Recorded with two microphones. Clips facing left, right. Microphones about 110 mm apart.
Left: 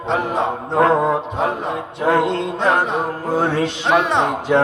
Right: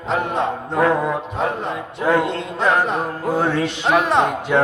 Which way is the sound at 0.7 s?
35° left (ahead or behind).